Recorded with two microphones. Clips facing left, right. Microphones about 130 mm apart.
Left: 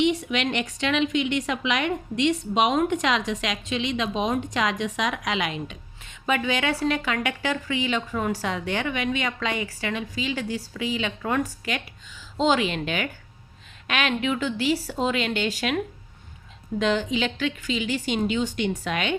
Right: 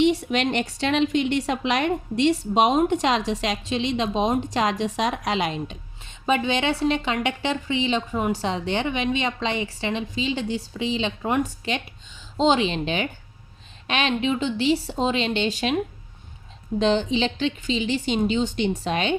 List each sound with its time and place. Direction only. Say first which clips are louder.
0.0 s a woman's voice: right 3 dB; 35° right (ahead or behind)